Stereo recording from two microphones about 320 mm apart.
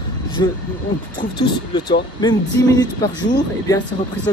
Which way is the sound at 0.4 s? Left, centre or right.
Centre.